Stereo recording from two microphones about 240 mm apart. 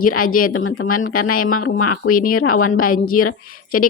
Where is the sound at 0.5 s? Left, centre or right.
Left.